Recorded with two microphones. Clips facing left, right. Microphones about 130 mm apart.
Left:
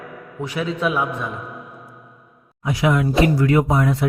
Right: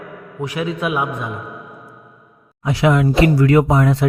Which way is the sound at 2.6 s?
70° right (ahead or behind).